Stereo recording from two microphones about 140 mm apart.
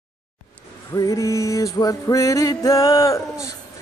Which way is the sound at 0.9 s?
25° left (ahead or behind).